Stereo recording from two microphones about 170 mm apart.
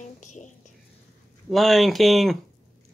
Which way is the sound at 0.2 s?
45° left (ahead or behind).